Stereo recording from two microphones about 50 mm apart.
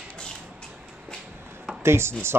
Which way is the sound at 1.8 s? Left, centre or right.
Right.